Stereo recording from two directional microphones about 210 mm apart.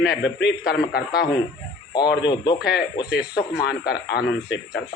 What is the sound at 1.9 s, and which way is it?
Speech, 20° left (ahead or behind).